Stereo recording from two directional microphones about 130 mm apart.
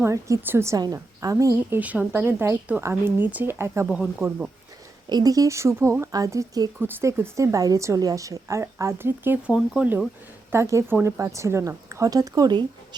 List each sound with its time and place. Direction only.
0.0 s a woman's voice: 20° right (ahead or behind)
1.8 s speech: 10° right (ahead or behind)
3.8 s speech: 5° right (ahead or behind)
5.0 s a woman's voice: 30° right (ahead or behind); by 10.1 s 10° right (ahead or behind)
10.5 s a woman's voice: 20° right (ahead or behind)